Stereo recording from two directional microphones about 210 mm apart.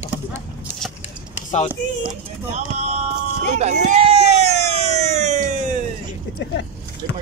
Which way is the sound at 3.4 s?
30° right (ahead or behind).